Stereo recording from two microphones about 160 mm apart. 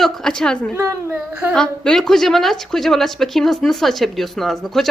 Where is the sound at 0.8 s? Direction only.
15° right (ahead or behind).